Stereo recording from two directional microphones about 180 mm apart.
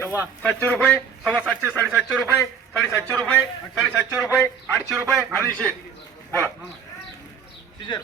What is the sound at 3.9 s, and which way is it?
Speech, 5° right (ahead or behind).